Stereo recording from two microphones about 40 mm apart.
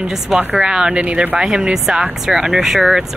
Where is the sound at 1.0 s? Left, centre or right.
Right.